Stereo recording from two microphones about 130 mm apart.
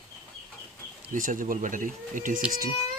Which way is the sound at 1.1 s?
90° right.